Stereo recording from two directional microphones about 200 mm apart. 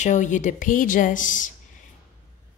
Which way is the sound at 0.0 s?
40° left (ahead or behind).